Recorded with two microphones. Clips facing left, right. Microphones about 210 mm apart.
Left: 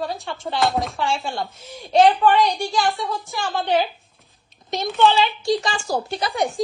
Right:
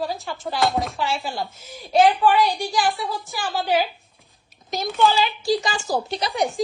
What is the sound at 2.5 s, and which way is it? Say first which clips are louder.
Speech: left 1 dB; 15° right (ahead or behind).